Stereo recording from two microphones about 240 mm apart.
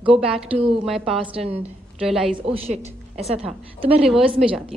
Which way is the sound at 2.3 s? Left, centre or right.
Right.